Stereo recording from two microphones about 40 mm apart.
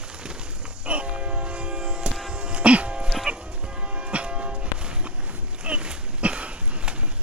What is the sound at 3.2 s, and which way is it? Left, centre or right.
Church bell, right.